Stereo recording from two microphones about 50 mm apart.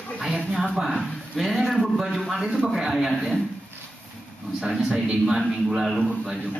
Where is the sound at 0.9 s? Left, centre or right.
Centre.